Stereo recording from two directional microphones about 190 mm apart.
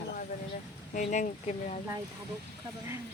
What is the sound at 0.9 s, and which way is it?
Speech, 40° left (ahead or behind).